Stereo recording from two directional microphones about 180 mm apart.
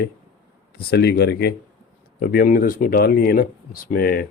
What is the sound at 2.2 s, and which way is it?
Speech, 55° left (ahead or behind).